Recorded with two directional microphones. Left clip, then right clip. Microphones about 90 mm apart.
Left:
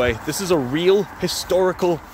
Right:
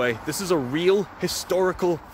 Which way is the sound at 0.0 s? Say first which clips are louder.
Left 4 dB; 5° right (ahead or behind).